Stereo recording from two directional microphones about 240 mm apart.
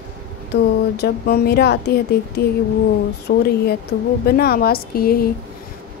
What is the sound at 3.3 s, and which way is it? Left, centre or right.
Speech, left.